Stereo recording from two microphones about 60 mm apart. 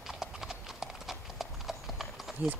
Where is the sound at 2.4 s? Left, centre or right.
Right.